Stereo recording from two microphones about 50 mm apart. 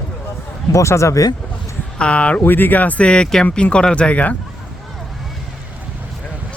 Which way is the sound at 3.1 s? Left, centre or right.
Centre.